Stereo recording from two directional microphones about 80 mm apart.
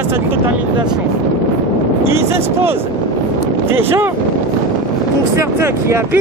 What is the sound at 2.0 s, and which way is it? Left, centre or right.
Speech, right.